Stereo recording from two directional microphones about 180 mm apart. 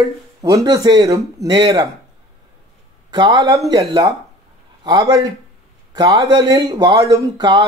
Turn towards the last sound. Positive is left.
turn(degrees=-25)  # may be behind; listen again after turning